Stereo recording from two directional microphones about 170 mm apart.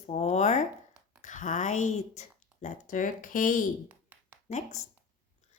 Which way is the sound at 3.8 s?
10° right (ahead or behind).